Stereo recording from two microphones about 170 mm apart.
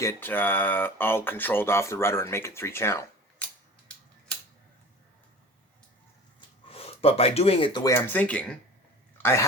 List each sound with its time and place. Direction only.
0.0 s speech: 15° left (ahead or behind)
6.7 s speech: 35° left (ahead or behind)
7.9 s speech: 10° left (ahead or behind)